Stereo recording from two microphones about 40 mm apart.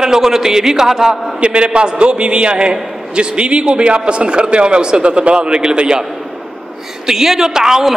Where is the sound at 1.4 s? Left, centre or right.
Right.